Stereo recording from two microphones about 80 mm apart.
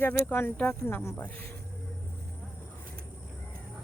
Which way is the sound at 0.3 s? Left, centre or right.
Left.